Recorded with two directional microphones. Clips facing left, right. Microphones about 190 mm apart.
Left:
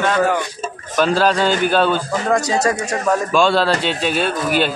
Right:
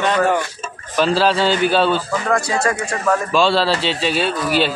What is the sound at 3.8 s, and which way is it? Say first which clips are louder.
Speech: even; 50° left (ahead or behind).